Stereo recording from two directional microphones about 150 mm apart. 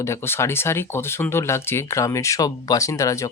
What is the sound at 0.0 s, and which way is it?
Speech, 15° left (ahead or behind).